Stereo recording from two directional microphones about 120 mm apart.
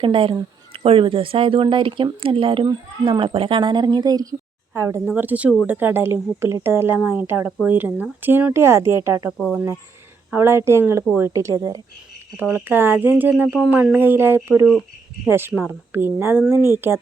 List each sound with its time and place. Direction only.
0.0 s speech: 45° right (ahead or behind); by 9.3 s 25° right (ahead or behind)
9.4 s speech: 15° right (ahead or behind)
12.4 s speech: 15° right (ahead or behind)